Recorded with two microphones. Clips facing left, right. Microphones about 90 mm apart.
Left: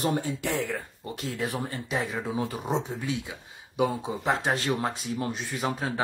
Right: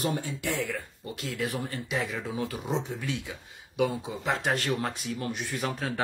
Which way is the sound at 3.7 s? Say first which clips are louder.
Left 1 dB; 35° left (ahead or behind).